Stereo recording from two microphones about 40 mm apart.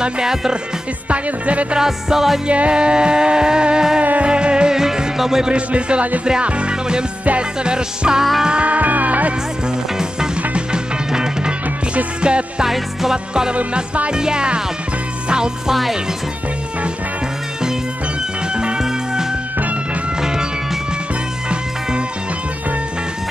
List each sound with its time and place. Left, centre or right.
0.0 s music: centre
1.0 s music: right
1.8 s music: centre
2.4 s music: right
4.0 s music: right
4.3 s music: right
5.5 s music: right
8.6 s music: right
11.1 s music: centre
12.6 s music: centre
13.3 s music: right
15.7 s speech: centre
18.5 s music: right
18.8 s music: centre